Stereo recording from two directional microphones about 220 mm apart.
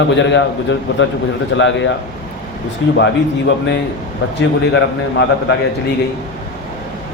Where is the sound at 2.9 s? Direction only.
55° left (ahead or behind).